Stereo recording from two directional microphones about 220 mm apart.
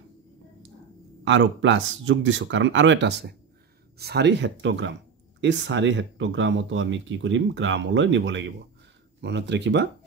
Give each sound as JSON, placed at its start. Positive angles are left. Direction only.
{"t": 1.2, "sound": "speech", "side_deg": -60}